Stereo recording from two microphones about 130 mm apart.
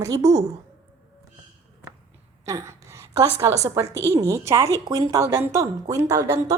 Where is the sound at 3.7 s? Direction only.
25° right (ahead or behind).